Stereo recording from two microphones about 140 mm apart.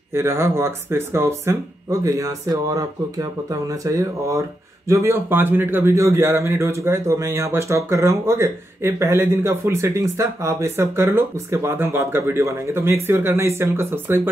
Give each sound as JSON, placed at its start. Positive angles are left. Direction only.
{"t": 0.1, "sound": "speech", "side_deg": -20}